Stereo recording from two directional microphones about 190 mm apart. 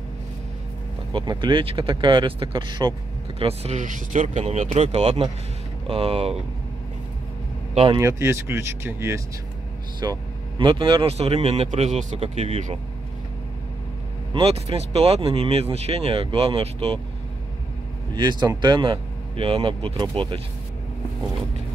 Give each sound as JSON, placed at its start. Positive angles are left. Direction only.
{"t": 1.1, "sound": "speech", "side_deg": -25}
{"t": 7.7, "sound": "speech", "side_deg": -35}
{"t": 8.0, "sound": "speech", "side_deg": -15}
{"t": 14.3, "sound": "speech", "side_deg": -30}
{"t": 18.1, "sound": "speech", "side_deg": -25}